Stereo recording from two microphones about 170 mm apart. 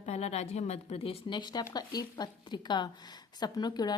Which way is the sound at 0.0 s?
40° left (ahead or behind).